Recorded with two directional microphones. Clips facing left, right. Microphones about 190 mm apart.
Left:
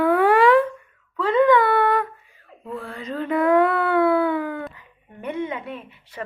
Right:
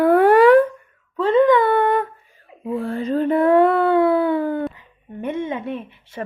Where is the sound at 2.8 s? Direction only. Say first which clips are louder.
Right 10 dB; 30° right (ahead or behind).